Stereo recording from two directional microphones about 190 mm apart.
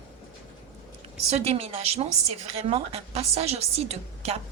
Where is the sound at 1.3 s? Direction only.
30° right (ahead or behind).